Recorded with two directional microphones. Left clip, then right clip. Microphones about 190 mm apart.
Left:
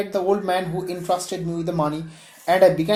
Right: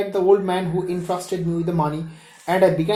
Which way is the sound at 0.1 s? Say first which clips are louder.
Right 4 dB; 35° left (ahead or behind).